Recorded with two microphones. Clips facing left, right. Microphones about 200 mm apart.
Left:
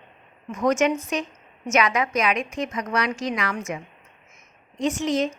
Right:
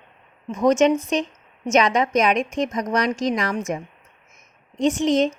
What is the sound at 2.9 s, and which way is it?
Speech, 40° right (ahead or behind).